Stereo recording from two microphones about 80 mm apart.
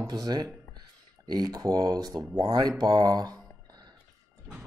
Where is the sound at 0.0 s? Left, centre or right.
Right.